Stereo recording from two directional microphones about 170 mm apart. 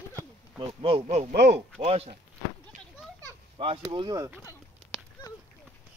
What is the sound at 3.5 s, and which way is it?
Speech, 35° right (ahead or behind).